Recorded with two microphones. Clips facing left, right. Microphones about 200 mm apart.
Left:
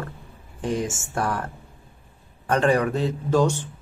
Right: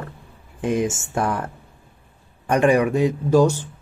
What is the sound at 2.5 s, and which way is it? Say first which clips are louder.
Speech: right 3 dB; 15° right (ahead or behind).